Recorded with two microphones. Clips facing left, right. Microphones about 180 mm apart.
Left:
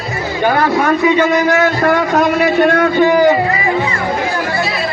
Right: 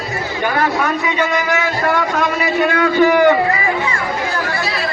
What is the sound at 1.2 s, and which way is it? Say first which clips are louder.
A man's voice: left 6 dB; 45° left (ahead or behind).